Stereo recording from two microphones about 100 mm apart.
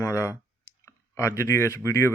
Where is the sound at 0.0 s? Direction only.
30° left (ahead or behind).